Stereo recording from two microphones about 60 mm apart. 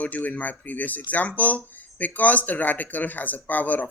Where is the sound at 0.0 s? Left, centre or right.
Left.